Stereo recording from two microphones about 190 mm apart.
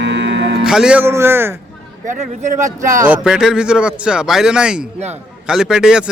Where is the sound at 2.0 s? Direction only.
40° right (ahead or behind).